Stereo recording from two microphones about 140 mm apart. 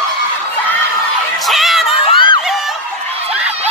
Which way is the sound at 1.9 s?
35° left (ahead or behind).